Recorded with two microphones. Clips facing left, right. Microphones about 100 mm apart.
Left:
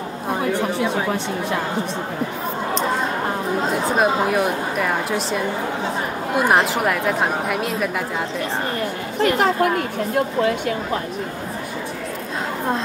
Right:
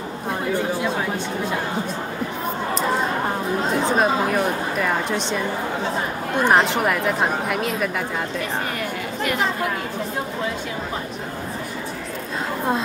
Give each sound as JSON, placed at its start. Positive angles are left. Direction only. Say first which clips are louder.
{"t": 3.8, "sound": "a woman's voice", "louder": "left 1 dB", "side_deg": 5}
{"t": 9.2, "sound": "a woman's voice", "louder": "left 6 dB", "side_deg": 35}